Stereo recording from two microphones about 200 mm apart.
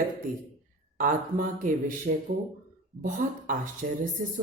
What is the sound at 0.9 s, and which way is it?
Speech, 45° right (ahead or behind).